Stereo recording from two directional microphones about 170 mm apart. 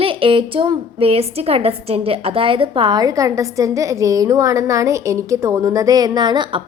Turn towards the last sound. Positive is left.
turn(degrees=-25)  # may be behind; listen again after turning